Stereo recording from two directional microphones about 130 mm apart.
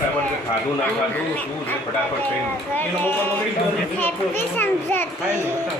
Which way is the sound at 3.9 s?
15° left (ahead or behind).